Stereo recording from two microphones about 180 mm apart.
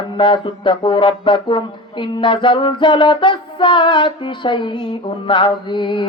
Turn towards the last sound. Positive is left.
turn(degrees=25)  # may be behind; listen again after turning